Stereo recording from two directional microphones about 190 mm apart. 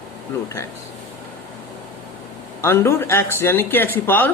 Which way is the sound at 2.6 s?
15° left (ahead or behind).